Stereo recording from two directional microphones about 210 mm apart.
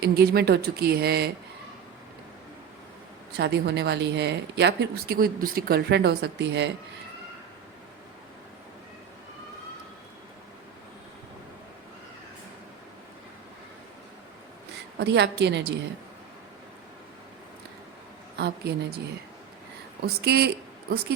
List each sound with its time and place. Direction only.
0.0 s speech: 50° right (ahead or behind)
3.3 s speech: 55° right (ahead or behind)
14.9 s speech: 55° right (ahead or behind)
18.3 s speech: 50° right (ahead or behind)
20.2 s speech: 50° right (ahead or behind)